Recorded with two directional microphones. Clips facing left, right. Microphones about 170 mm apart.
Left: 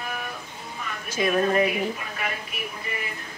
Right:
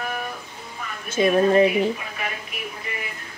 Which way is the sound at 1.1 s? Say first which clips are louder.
Right 5 dB; 25° right (ahead or behind).